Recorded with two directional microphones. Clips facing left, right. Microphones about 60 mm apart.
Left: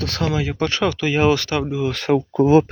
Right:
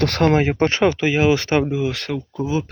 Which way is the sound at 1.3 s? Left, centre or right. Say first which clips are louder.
Right 3 dB; right.